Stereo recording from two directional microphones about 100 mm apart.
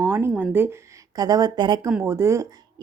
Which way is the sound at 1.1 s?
40° right (ahead or behind).